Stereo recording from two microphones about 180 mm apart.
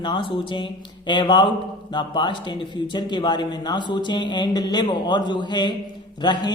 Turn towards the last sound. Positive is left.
turn(degrees=25)  # may be behind; listen again after turning